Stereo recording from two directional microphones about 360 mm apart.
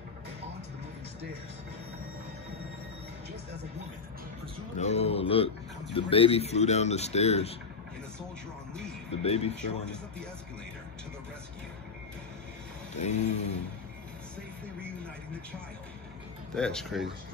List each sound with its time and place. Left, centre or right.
4.7 s speech: centre
9.1 s speech: centre
12.9 s a sound: centre
16.5 s speech: centre